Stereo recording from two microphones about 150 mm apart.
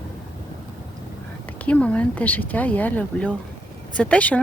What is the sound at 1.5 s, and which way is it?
Speech, 10° left (ahead or behind).